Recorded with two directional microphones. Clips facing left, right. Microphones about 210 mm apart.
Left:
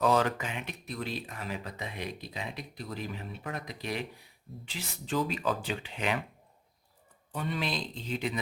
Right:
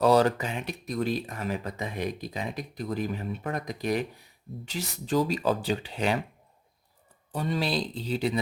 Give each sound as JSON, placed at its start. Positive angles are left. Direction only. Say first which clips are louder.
{"t": 0.0, "sound": "speech", "louder": "right 5 dB", "side_deg": -35}
{"t": 7.3, "sound": "speech", "louder": "right 5 dB", "side_deg": -35}